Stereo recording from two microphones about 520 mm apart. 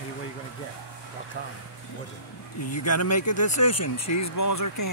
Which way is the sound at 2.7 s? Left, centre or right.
Left.